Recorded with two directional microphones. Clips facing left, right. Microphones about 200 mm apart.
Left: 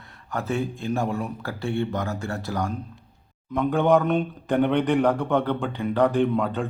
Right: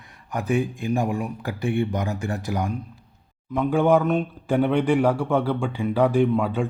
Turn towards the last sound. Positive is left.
turn(degrees=-10)  # may be behind; listen again after turning